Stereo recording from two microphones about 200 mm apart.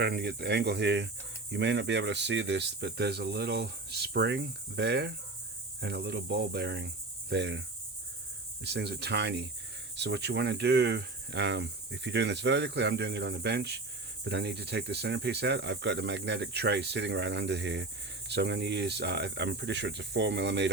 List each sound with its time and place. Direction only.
0.0 s cricket: 55° right (ahead or behind)
8.6 s cricket: 55° right (ahead or behind)